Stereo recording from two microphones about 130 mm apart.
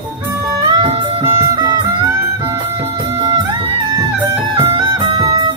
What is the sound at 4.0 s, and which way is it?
Music, 35° right (ahead or behind).